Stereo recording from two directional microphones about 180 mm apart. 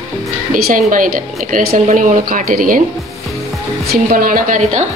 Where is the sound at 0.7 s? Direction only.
50° right (ahead or behind).